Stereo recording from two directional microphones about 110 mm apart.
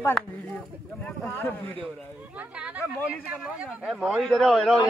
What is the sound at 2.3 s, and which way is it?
A man's voice, 10° right (ahead or behind).